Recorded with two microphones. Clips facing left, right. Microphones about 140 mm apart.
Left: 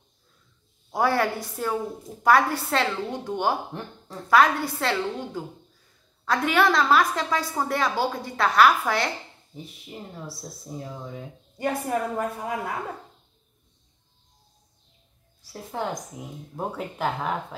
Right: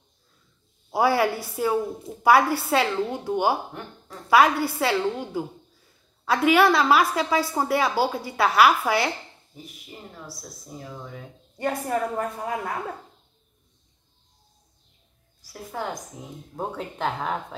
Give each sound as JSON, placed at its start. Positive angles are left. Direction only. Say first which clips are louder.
{"t": 0.9, "sound": "a woman's voice", "louder": "right 2 dB", "side_deg": -10}
{"t": 11.5, "sound": "speech", "louder": "even", "side_deg": 0}
{"t": 15.4, "sound": "a woman's voice", "louder": "left 1 dB", "side_deg": 20}
{"t": 16.5, "sound": "speech", "louder": "even", "side_deg": 5}